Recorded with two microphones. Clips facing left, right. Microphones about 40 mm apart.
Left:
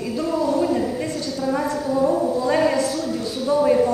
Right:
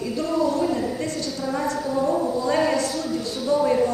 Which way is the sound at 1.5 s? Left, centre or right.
Centre.